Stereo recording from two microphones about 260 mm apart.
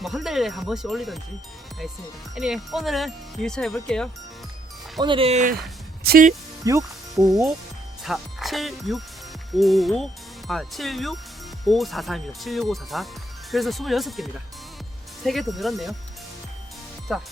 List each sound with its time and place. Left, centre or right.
0.0 s speech: centre
2.3 s speech: centre
4.9 s speech: centre
6.7 s speech: centre
8.0 s speech: centre
17.1 s speech: centre